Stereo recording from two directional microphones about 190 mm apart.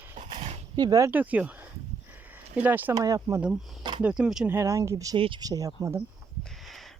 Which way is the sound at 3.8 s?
25° right (ahead or behind).